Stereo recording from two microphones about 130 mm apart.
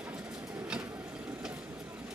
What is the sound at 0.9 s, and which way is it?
Vehicle, 10° right (ahead or behind).